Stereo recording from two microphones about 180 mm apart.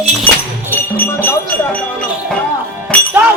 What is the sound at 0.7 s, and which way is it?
Music, 10° left (ahead or behind).